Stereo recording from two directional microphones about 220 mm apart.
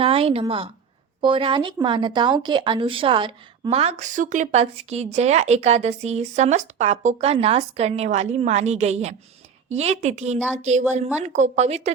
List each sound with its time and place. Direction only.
0.0 s a woman's voice: 25° right (ahead or behind)
10.3 s speech: 5° left (ahead or behind)
10.6 s a woman's voice: 30° right (ahead or behind)